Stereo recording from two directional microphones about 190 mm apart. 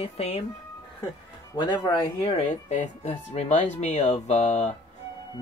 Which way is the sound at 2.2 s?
35° left (ahead or behind).